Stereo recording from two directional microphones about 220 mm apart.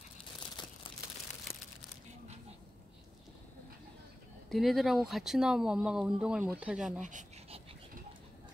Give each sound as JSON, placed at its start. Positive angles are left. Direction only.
{"t": 0.6, "sound": "crumpling", "side_deg": 20}
{"t": 4.5, "sound": "speech", "side_deg": 0}
{"t": 7.0, "sound": "dog", "side_deg": -35}